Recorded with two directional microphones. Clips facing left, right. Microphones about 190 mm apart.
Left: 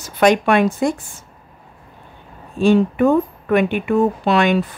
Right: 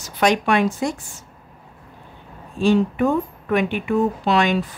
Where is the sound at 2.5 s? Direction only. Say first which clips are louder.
Left 3 dB; 55° left (ahead or behind).